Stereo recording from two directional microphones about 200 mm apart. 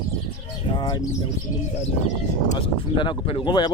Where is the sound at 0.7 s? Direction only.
20° left (ahead or behind).